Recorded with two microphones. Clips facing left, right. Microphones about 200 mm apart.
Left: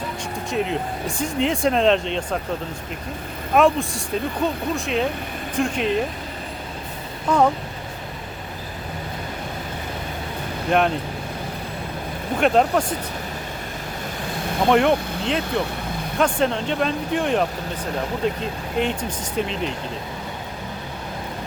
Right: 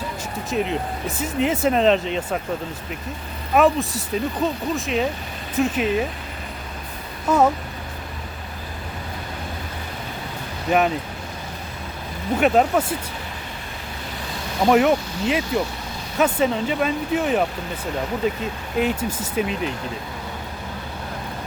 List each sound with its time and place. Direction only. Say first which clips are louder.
0.5 s speech: right 1 dB; centre (ahead or behind)
3.5 s speech: even; centre (ahead or behind)
7.3 s speech: right 1 dB; 5° right (ahead or behind)
10.7 s speech: even; 5° right (ahead or behind)
12.4 s speech: even; 5° right (ahead or behind)
14.7 s speech: right 1 dB; 5° right (ahead or behind)